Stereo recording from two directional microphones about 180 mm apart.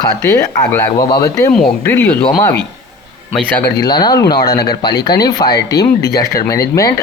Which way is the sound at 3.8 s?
25° left (ahead or behind).